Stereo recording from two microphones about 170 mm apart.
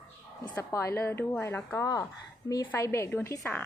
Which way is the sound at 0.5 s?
15° left (ahead or behind).